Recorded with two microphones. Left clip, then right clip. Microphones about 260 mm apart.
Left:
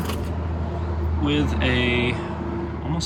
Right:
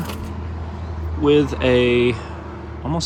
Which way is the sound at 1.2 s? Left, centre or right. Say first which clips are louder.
Right 8 dB; centre.